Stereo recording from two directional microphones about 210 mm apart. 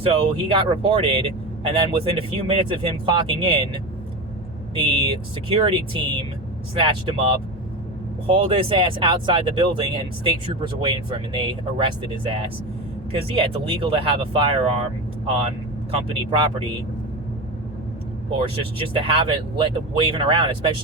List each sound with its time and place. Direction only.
0.0 s speech: 25° right (ahead or behind)
4.7 s speech: 25° right (ahead or behind)
18.3 s speech: 25° right (ahead or behind)